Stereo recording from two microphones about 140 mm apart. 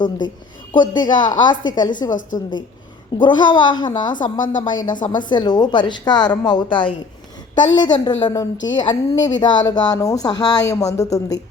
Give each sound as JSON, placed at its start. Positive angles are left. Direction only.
{"t": 0.8, "sound": "a woman's voice", "side_deg": 30}
{"t": 2.0, "sound": "a woman's voice", "side_deg": 65}
{"t": 3.2, "sound": "a woman's voice", "side_deg": 35}